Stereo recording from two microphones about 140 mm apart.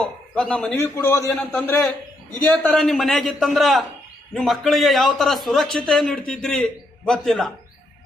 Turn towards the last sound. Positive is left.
turn(degrees=5)  # may be behind; listen again after turning